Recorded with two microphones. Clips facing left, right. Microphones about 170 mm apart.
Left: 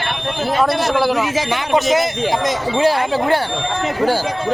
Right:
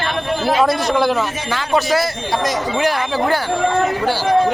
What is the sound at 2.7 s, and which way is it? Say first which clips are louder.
Speech: left 5 dB; 30° left (ahead or behind).